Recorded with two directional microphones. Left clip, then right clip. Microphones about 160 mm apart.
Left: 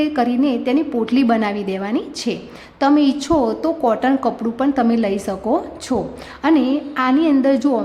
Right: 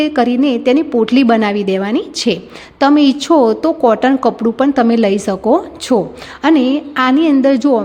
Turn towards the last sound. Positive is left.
turn(degrees=-30)  # may be behind; listen again after turning